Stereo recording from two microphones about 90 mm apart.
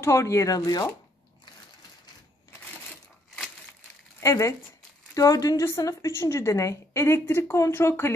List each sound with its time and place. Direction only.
0.0 s a woman's voice: 30° left (ahead or behind)
4.2 s a woman's voice: 35° left (ahead or behind)